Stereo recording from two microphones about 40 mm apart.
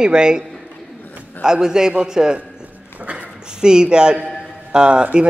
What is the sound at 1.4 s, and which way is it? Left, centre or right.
A man's voice, centre.